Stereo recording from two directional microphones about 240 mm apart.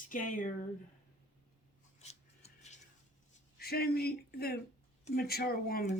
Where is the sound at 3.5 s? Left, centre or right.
Left.